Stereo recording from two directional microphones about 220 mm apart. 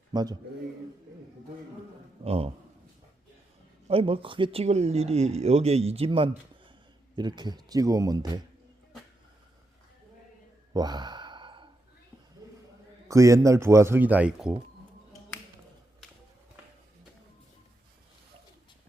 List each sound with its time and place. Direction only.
0.1 s speech: 20° right (ahead or behind)
2.2 s a man's voice: 25° right (ahead or behind)
3.8 s a man's voice: 25° right (ahead or behind)
10.8 s sigh: 20° right (ahead or behind)
13.1 s a man's voice: 15° right (ahead or behind)